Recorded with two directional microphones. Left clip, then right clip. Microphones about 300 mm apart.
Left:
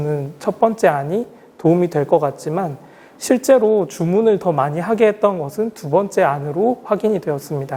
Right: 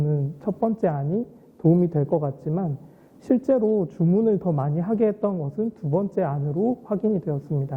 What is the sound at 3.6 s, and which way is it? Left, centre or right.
Speech, centre.